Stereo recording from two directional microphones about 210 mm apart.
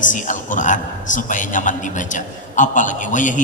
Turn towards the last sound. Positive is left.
turn(degrees=35)  # may be behind; listen again after turning